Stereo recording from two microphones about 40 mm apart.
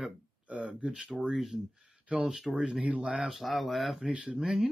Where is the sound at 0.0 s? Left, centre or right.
Right.